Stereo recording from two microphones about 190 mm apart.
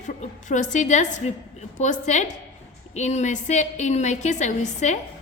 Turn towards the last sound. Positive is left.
turn(degrees=40)  # may be behind; listen again after turning